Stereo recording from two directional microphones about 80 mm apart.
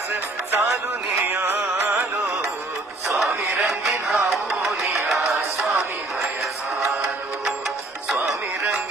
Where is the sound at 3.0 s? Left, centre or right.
Centre.